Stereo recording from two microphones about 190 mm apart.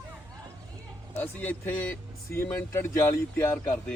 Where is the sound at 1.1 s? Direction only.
10° left (ahead or behind).